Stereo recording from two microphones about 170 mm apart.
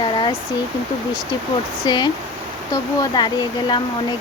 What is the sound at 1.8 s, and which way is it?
Speech, 25° left (ahead or behind).